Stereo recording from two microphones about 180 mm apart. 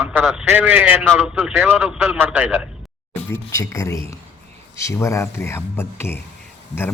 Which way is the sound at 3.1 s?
15° left (ahead or behind).